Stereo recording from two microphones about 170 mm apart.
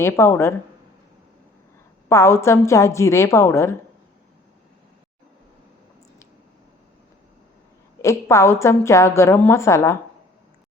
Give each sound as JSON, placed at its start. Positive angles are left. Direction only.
{"t": 0.0, "sound": "a woman's voice", "side_deg": 15}
{"t": 2.0, "sound": "a woman's voice", "side_deg": 15}
{"t": 8.0, "sound": "a woman's voice", "side_deg": 20}